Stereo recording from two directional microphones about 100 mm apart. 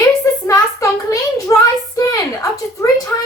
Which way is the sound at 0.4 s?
35° left (ahead or behind).